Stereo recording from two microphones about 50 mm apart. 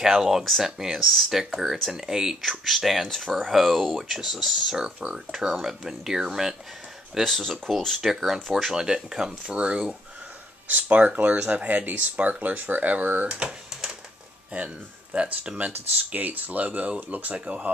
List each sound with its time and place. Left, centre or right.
0.0 s speech: centre
3.4 s speech: centre
7.2 s speech: centre
8.0 s speech: centre
8.7 s speech: centre
9.5 s speech: right
13.3 s speech: centre
13.7 s a sound: centre
15.4 s speech: right